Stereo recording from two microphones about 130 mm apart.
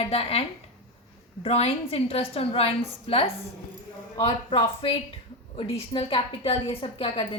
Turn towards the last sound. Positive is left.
turn(degrees=40)  # may be behind; listen again after turning